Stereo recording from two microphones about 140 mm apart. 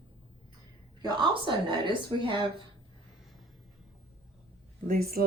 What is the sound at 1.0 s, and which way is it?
A woman's voice, 30° right (ahead or behind).